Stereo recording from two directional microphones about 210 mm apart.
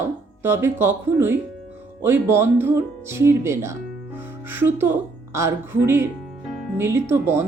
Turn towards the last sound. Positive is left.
turn(degrees=-10)  # may be behind; listen again after turning